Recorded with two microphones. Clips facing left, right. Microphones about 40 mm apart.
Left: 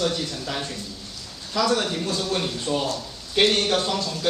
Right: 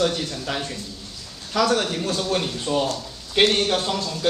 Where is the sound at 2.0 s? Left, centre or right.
Centre.